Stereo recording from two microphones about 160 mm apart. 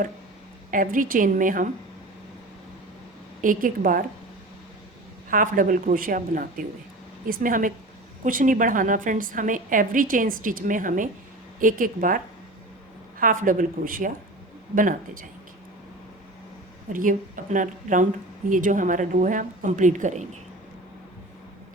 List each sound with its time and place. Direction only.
0.7 s a woman's voice: 55° right (ahead or behind)
3.4 s a woman's voice: 60° right (ahead or behind)
5.3 s a woman's voice: 55° right (ahead or behind)
16.9 s speech: 55° right (ahead or behind)